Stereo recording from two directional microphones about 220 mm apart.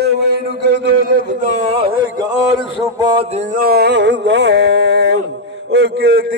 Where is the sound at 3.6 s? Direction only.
45° right (ahead or behind).